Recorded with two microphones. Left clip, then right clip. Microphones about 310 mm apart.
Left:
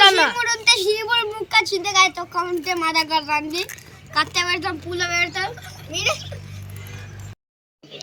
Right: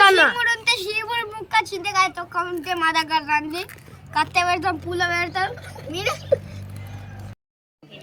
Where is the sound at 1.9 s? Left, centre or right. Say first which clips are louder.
Left 3 dB; centre.